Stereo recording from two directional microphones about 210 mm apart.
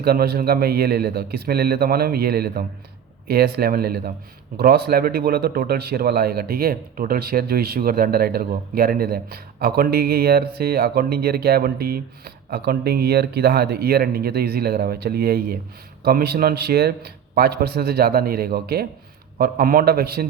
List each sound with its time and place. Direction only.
0.0 s speech: 50° right (ahead or behind)